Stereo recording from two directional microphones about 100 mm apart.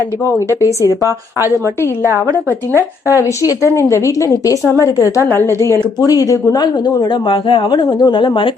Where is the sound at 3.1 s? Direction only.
35° left (ahead or behind).